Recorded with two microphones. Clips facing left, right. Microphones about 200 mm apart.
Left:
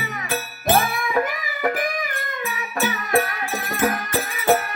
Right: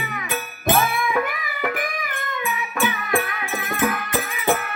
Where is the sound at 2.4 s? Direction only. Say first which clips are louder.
Right 1 dB; 40° left (ahead or behind).